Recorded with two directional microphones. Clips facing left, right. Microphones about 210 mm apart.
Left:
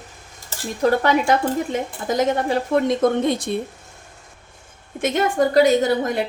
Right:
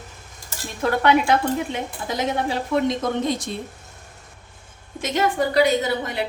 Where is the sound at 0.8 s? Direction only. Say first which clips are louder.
Left 1 dB; 40° left (ahead or behind).